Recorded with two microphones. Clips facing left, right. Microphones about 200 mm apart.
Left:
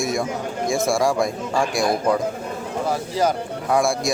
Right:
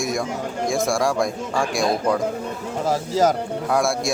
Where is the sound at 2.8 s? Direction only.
40° right (ahead or behind).